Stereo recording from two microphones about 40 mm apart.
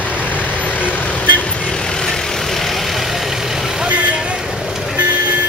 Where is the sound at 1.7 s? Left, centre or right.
Centre.